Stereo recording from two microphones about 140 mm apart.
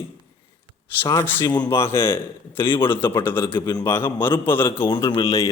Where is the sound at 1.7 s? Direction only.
15° left (ahead or behind).